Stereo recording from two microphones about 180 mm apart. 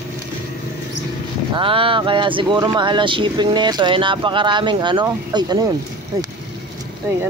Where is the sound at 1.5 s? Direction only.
30° right (ahead or behind).